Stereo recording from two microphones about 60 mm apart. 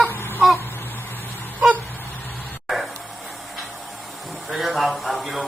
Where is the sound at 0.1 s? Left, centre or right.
Left.